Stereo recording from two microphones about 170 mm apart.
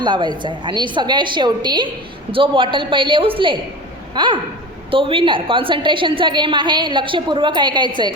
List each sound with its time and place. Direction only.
0.0 s a woman's voice: 25° right (ahead or behind)